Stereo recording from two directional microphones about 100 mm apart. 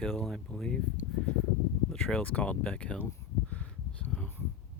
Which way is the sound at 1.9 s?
5° left (ahead or behind).